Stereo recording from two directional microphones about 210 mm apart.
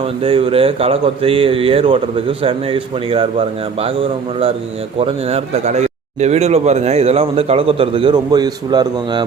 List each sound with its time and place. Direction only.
0.0 s speech: 25° right (ahead or behind)
4.9 s speech: 30° right (ahead or behind)